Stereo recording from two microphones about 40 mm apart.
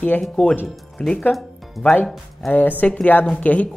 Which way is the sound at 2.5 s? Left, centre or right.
Left.